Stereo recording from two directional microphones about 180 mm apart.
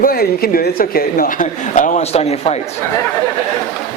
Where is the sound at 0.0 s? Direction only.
55° left (ahead or behind); by 2.6 s 35° left (ahead or behind).